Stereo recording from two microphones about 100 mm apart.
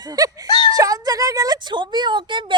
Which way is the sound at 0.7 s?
35° right (ahead or behind).